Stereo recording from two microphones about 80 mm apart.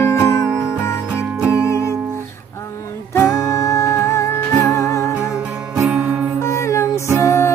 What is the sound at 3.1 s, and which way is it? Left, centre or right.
Music, left.